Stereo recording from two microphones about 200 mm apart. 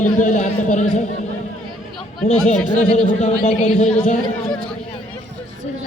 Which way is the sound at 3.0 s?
35° left (ahead or behind).